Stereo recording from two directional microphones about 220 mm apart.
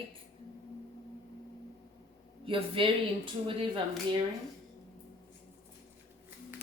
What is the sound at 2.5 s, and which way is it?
A woman's voice, 25° right (ahead or behind).